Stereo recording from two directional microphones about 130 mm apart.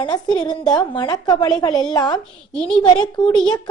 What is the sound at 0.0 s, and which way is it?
A woman's voice, 35° left (ahead or behind).